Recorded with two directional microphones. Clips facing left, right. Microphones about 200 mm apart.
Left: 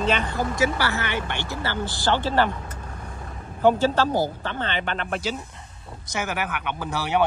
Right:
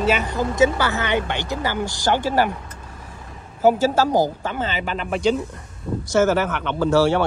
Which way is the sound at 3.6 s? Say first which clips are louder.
Right 2 dB; 10° right (ahead or behind).